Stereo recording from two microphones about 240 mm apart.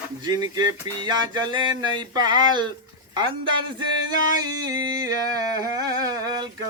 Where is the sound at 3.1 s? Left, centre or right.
Centre.